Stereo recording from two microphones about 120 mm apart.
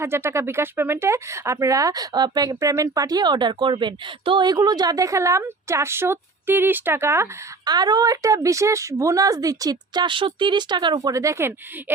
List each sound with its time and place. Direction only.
0.0 s speech: 20° right (ahead or behind)
7.6 s speech: 35° right (ahead or behind)